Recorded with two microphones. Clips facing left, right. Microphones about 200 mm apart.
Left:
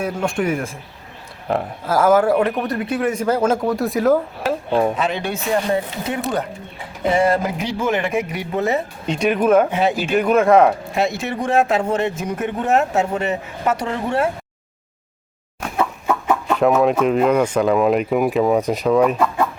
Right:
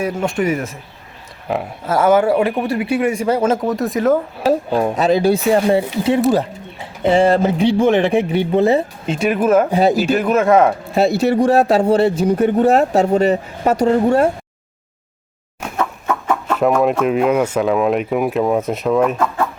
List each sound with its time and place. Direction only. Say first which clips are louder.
0.0 s speech: right 2 dB; 5° right (ahead or behind)
4.9 s speech: right 8 dB; 40° right (ahead or behind)
9.0 s speech: even; 5° right (ahead or behind)
9.6 s speech: right 5 dB; 35° right (ahead or behind)
10.2 s speech: left 4 dB; centre (ahead or behind)
10.9 s speech: right 7 dB; 35° right (ahead or behind)
15.8 s chicken: even; 10° left (ahead or behind)
16.5 s speech: right 1 dB; centre (ahead or behind)